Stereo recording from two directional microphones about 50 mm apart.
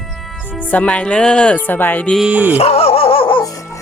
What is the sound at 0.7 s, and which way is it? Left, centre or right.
Speech, left.